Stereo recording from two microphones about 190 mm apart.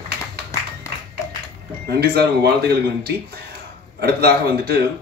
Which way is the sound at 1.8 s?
55° right (ahead or behind).